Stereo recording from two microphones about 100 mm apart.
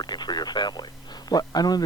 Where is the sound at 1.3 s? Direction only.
40° left (ahead or behind).